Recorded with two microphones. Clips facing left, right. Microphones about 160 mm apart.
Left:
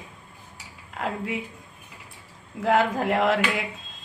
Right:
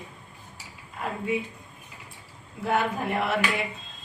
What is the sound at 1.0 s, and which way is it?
Speech, 90° left.